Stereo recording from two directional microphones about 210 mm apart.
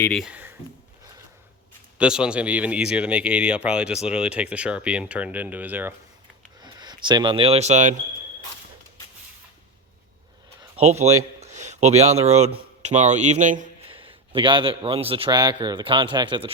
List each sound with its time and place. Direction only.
0.0 s speech: centre (ahead or behind)
2.0 s speech: 5° right (ahead or behind)
6.6 s speech: 20° right (ahead or behind)
10.6 s a sound: 30° right (ahead or behind)
11.3 s speech: 35° right (ahead or behind)
13.9 s a man's voice: 25° right (ahead or behind)